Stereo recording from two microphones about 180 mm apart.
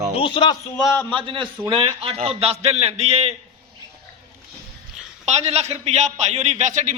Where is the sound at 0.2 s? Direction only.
25° left (ahead or behind).